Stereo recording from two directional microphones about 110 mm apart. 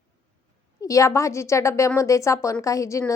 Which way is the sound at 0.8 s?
30° left (ahead or behind).